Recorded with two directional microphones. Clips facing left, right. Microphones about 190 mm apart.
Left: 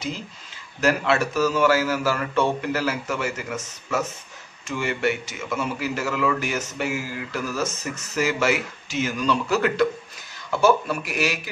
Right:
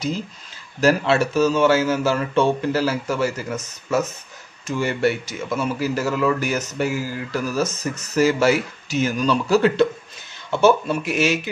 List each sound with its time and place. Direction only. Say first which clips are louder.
0.7 s a man's voice: right 4 dB; 30° right (ahead or behind)